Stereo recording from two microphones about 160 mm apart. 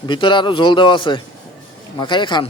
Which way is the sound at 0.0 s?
30° left (ahead or behind).